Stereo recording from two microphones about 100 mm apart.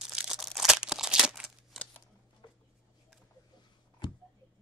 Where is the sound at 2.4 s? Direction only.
50° left (ahead or behind).